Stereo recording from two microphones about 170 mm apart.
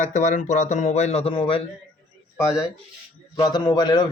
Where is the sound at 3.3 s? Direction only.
25° left (ahead or behind).